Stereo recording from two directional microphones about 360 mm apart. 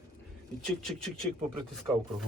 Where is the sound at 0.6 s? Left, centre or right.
Centre.